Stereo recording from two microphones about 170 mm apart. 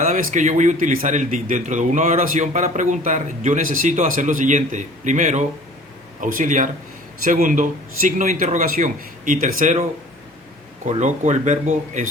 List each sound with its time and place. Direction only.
0.0 s speech: 45° right (ahead or behind)
10.8 s speech: 45° right (ahead or behind)